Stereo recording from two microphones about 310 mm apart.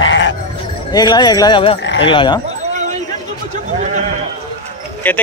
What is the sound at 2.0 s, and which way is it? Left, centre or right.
Speech, centre.